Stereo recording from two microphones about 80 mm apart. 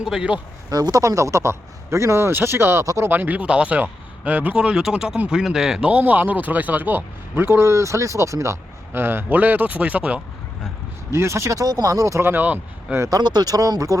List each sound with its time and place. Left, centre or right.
0.0 s speech: centre
0.7 s a man's voice: right
2.8 s speech: right
3.1 s speech: right
11.1 s a man's voice: right
12.3 s speech: right
13.0 s speech: right